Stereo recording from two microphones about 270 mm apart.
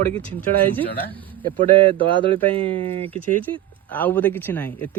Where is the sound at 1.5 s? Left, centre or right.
Centre.